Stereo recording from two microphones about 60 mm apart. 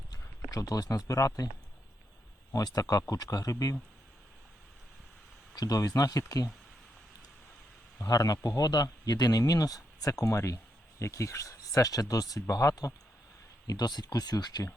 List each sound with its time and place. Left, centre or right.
0.1 s speech: left
2.5 s speech: left
5.5 s speech: left
8.0 s speech: left
9.4 s speech: left
13.7 s speech: left